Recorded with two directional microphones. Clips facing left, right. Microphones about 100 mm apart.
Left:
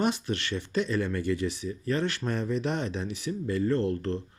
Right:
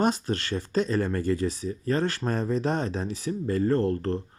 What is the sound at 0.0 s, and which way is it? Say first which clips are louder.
Speech: right 3 dB; 40° right (ahead or behind).